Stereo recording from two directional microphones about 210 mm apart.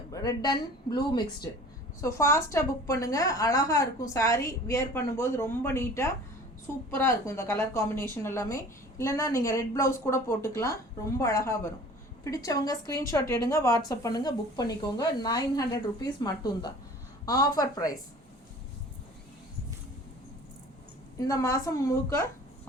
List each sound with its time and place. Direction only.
0.1 s a woman's voice: 15° left (ahead or behind)
21.2 s a woman's voice: 15° left (ahead or behind)